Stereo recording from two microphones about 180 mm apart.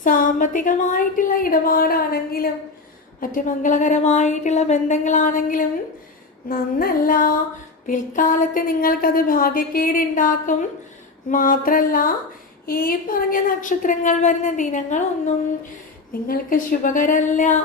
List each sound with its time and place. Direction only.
0.0 s speech: 50° left (ahead or behind)
16.2 s speech: 50° left (ahead or behind)